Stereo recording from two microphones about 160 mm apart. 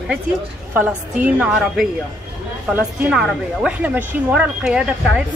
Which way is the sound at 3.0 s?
5° right (ahead or behind).